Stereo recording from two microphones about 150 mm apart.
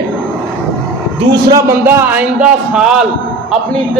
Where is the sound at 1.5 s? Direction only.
20° right (ahead or behind).